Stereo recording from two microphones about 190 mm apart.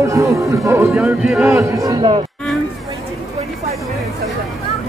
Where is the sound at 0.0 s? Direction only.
15° right (ahead or behind).